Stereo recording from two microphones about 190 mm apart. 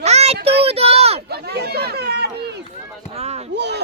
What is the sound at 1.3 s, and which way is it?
Speech, 60° right (ahead or behind).